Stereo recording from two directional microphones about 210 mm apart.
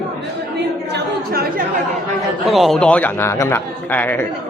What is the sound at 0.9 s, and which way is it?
Chatter, 45° right (ahead or behind).